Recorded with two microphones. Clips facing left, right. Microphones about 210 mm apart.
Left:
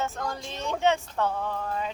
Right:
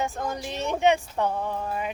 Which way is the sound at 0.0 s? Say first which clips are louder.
Right 2 dB; 15° right (ahead or behind).